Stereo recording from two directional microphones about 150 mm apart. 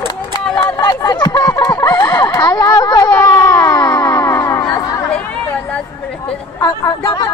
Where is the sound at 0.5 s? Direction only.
30° left (ahead or behind).